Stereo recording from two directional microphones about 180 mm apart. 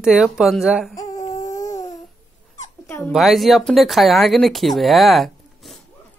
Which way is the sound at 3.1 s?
Centre (ahead or behind).